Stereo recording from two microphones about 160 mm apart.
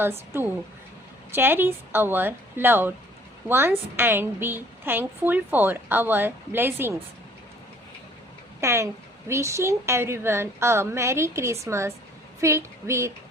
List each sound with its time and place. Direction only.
0.0 s a woman's voice: 15° right (ahead or behind)
8.6 s a woman's voice: 15° right (ahead or behind)